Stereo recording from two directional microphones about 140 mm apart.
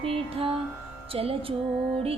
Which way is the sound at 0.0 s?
40° right (ahead or behind).